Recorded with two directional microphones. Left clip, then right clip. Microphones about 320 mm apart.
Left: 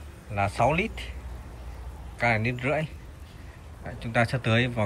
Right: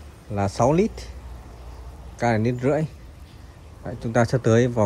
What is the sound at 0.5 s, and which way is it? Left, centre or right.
Speech, right.